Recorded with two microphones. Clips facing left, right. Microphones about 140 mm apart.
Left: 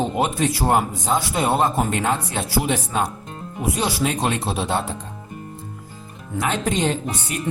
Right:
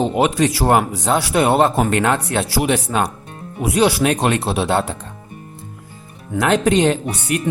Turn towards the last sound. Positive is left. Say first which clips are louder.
# right 5 dB
turn(degrees=-70)  # may be behind; listen again after turning